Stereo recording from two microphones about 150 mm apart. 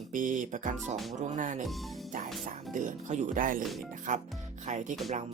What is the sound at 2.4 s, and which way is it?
Speech, 60° right (ahead or behind).